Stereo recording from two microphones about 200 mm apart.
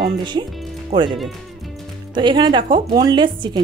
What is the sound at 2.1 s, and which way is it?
Speech, 25° right (ahead or behind).